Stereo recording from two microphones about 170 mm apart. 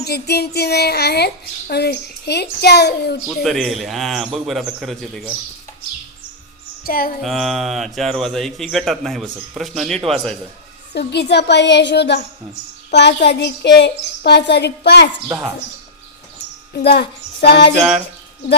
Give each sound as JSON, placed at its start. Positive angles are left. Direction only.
{"t": 0.0, "sound": "a child's voice", "side_deg": 70}
{"t": 3.2, "sound": "a man's voice", "side_deg": 0}
{"t": 6.8, "sound": "music", "side_deg": 60}
{"t": 7.2, "sound": "a man's voice", "side_deg": 0}
{"t": 10.9, "sound": "a child's voice", "side_deg": 75}
{"t": 13.2, "sound": "a child's voice", "side_deg": 80}
{"t": 16.7, "sound": "a child's voice", "side_deg": 75}